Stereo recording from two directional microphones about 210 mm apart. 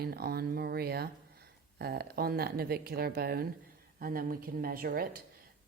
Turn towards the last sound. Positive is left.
turn(degrees=-45)  # may be behind; listen again after turning